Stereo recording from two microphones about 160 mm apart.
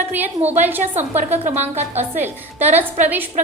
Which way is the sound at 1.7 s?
15° right (ahead or behind).